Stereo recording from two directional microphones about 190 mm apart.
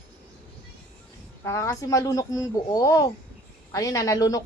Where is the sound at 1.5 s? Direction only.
15° left (ahead or behind).